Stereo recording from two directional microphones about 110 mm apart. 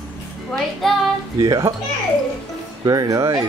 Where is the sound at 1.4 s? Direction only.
35° right (ahead or behind).